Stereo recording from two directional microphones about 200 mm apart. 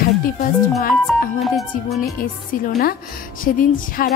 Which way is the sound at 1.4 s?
Centre (ahead or behind).